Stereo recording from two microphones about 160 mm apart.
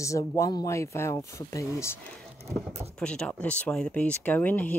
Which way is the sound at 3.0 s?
5° left (ahead or behind).